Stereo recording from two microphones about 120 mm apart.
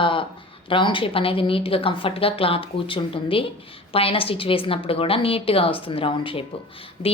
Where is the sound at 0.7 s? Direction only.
45° left (ahead or behind).